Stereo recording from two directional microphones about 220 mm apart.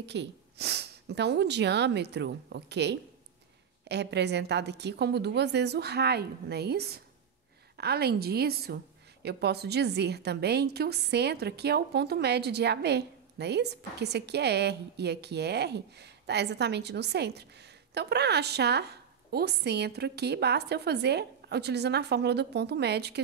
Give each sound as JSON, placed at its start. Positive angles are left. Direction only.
{"t": 0.0, "sound": "a woman's voice", "side_deg": -50}